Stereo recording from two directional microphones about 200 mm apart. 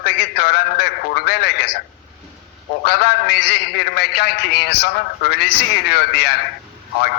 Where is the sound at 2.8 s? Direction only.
50° left (ahead or behind).